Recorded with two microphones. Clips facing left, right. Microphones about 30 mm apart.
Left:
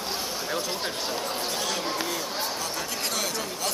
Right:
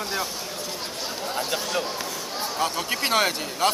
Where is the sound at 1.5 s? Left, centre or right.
Right.